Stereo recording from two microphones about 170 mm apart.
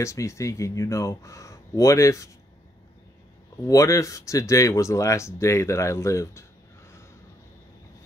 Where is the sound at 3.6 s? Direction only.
20° left (ahead or behind).